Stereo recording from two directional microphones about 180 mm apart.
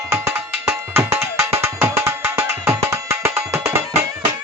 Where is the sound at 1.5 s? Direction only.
15° right (ahead or behind).